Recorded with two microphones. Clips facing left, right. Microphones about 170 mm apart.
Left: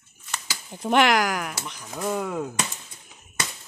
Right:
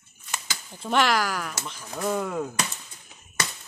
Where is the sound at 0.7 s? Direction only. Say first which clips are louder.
Left 3 dB; 15° left (ahead or behind).